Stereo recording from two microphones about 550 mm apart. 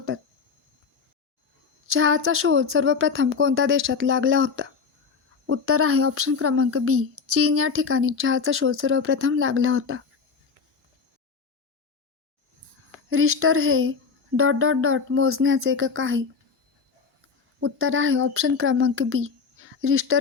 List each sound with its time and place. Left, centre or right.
1.9 s speech: right
13.1 s speech: right
17.6 s speech: right